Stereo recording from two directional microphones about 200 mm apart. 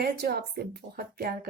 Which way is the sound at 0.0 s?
50° right (ahead or behind).